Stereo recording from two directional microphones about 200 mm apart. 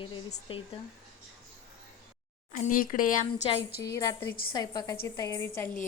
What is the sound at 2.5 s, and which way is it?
Speech, 45° left (ahead or behind).